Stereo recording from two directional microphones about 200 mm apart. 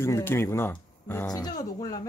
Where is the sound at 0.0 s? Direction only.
10° left (ahead or behind).